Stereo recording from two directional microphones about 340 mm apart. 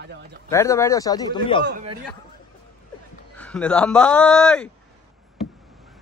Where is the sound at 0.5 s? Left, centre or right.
Centre.